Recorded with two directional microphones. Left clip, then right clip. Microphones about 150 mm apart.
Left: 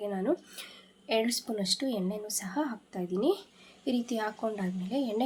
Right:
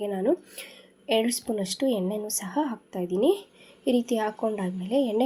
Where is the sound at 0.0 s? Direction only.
15° right (ahead or behind).